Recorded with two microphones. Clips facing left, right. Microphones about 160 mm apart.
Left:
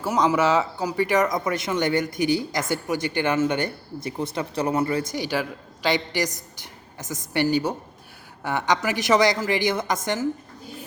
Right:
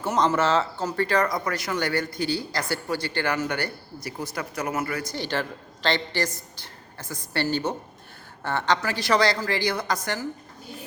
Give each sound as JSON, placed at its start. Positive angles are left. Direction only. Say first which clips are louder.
{"t": 0.0, "sound": "speech", "louder": "left 2 dB", "side_deg": 10}
{"t": 5.1, "sound": "a woman's voice", "louder": "left 2 dB", "side_deg": 10}